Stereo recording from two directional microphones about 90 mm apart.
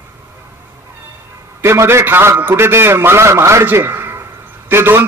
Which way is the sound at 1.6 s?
30° right (ahead or behind).